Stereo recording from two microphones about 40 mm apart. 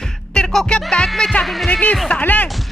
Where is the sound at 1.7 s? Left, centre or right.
Left.